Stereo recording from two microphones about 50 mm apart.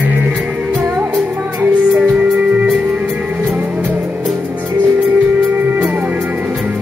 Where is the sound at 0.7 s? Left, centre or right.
Right.